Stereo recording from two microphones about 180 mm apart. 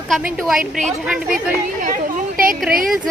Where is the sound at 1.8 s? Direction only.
50° right (ahead or behind).